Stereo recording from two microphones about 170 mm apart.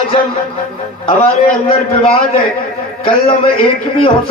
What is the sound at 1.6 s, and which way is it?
Speech, 35° left (ahead or behind).